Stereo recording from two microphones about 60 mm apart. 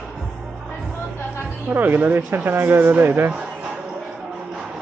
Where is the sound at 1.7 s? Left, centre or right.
Right.